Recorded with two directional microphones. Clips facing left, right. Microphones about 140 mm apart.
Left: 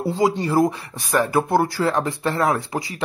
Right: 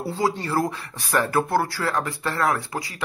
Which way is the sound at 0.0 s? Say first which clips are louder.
Left 5 dB; 20° left (ahead or behind).